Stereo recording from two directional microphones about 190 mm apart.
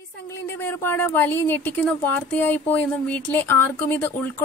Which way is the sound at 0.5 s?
10° left (ahead or behind).